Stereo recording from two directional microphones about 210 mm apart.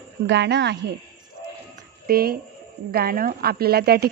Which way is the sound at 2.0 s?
45° right (ahead or behind).